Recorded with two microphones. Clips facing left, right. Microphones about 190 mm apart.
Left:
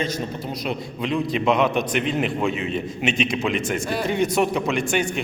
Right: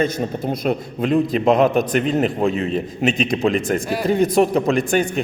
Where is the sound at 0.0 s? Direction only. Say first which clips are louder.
Right 6 dB; 50° right (ahead or behind).